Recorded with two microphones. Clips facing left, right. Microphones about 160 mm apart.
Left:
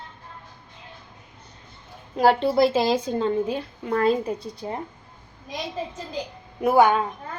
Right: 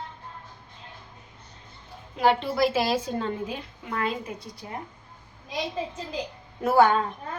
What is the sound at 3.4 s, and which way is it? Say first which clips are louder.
A woman's voice: left 8 dB; 40° left (ahead or behind).